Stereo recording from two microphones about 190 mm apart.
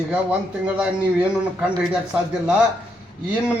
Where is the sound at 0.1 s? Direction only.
5° right (ahead or behind).